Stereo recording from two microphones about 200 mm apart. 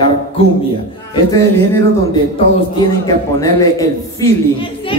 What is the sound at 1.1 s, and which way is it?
Speech, 15° left (ahead or behind).